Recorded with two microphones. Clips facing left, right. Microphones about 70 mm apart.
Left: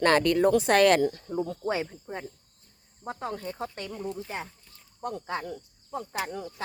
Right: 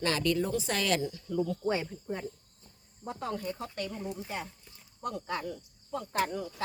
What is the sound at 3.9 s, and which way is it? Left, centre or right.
Speech, centre.